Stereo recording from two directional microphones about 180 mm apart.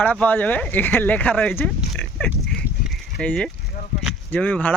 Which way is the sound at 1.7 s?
5° left (ahead or behind).